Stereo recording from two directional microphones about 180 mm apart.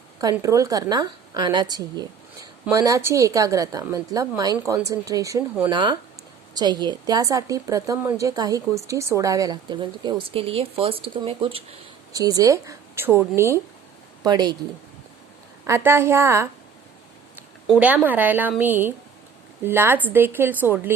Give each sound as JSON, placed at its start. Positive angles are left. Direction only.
{"t": 0.2, "sound": "a woman's voice", "side_deg": -20}
{"t": 12.1, "sound": "a woman's voice", "side_deg": -20}
{"t": 15.6, "sound": "speech", "side_deg": -15}
{"t": 17.7, "sound": "speech", "side_deg": -10}